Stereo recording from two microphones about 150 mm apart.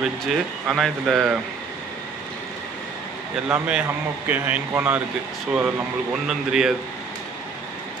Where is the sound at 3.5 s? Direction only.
10° right (ahead or behind).